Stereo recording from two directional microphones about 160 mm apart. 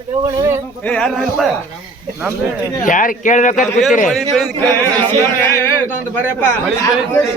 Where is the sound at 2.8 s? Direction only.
55° left (ahead or behind).